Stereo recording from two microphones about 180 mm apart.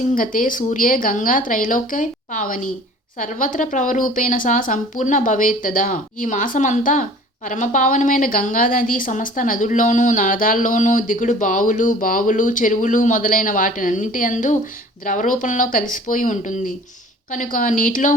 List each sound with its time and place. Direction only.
0.1 s a woman's voice: 50° left (ahead or behind)